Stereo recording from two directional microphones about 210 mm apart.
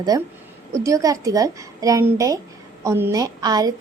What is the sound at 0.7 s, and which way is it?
A woman's voice, 15° right (ahead or behind).